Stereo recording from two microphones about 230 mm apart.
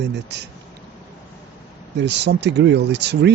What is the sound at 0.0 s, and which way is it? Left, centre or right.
Speech, right.